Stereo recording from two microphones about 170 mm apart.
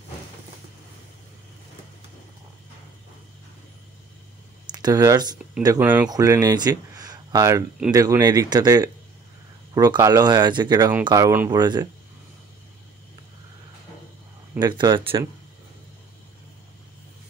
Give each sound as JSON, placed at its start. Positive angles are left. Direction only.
{"t": 4.6, "sound": "speech", "side_deg": -25}
{"t": 14.6, "sound": "speech", "side_deg": -25}